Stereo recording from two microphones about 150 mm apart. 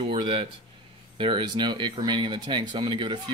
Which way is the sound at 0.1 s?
35° right (ahead or behind).